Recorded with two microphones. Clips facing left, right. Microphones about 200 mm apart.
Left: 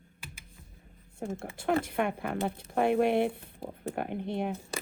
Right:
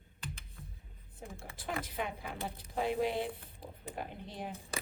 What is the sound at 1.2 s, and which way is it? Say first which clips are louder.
Speech: left 11 dB; 60° left (ahead or behind).